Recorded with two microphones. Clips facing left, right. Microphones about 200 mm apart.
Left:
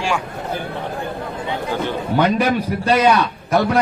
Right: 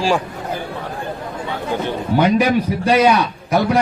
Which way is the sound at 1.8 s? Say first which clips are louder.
Right 2 dB; 10° right (ahead or behind).